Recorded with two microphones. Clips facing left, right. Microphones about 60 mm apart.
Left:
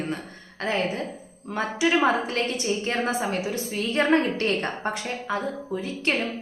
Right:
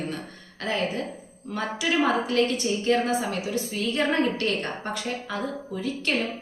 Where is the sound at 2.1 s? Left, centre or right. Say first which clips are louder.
Right 1 dB; left.